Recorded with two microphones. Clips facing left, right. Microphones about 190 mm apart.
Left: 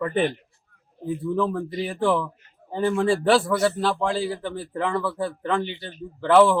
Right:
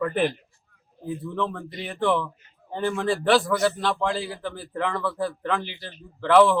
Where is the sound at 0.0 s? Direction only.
Centre (ahead or behind).